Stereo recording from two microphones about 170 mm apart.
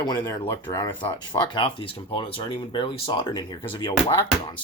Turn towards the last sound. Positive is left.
turn(degrees=25)  # may be behind; listen again after turning